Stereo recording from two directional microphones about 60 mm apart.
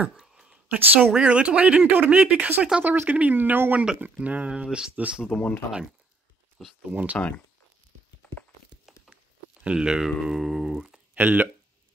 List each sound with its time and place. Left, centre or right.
0.2 s a sound: centre
0.7 s speech: right
1.1 s speech: centre
2.8 s speech: right
3.7 s speech: centre
4.0 s speech: right
4.5 s speech: centre
6.6 s speech: centre
7.2 s speech: left
9.1 s speech: centre
11.1 s speech: right